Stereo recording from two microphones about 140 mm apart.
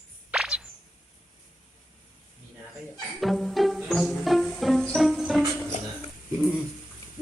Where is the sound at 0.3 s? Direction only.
5° right (ahead or behind).